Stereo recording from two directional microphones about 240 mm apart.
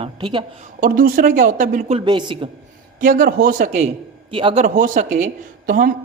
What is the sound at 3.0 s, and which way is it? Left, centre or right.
Speech, right.